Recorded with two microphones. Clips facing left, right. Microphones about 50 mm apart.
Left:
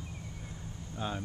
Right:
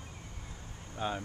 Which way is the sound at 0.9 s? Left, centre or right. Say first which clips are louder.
Right 2 dB; centre.